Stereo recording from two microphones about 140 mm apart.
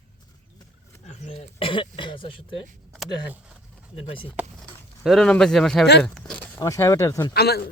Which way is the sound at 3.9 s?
40° left (ahead or behind).